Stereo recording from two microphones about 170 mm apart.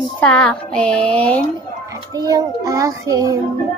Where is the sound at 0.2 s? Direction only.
5° left (ahead or behind).